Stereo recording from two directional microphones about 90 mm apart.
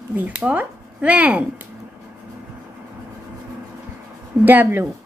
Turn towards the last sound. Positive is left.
turn(degrees=-20)  # may be behind; listen again after turning